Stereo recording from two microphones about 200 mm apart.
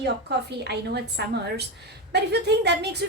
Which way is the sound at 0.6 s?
55° right (ahead or behind).